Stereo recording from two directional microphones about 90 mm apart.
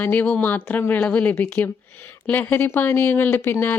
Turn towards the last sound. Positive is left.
turn(degrees=25)  # may be behind; listen again after turning